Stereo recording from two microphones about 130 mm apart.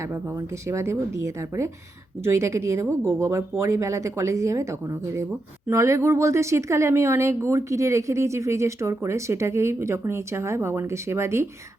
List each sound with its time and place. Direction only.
0.0 s speech: 20° right (ahead or behind)